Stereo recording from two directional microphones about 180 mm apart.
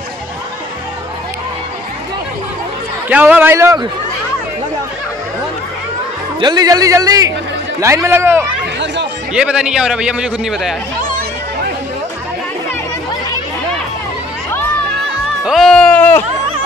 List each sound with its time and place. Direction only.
3.1 s a man's voice: 10° right (ahead or behind)
6.4 s a man's voice: 20° right (ahead or behind); by 10.8 s centre (ahead or behind)
15.4 s speech: centre (ahead or behind)